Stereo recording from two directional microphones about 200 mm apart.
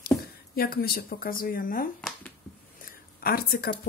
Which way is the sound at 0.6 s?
50° left (ahead or behind).